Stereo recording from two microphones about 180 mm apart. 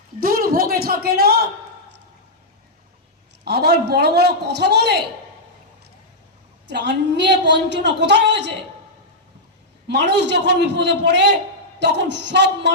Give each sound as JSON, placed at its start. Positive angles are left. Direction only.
{"t": 0.2, "sound": "a man's voice", "side_deg": -55}
{"t": 3.4, "sound": "a man's voice", "side_deg": -65}
{"t": 6.7, "sound": "a woman's voice", "side_deg": -70}
{"t": 9.8, "sound": "a woman's voice", "side_deg": -70}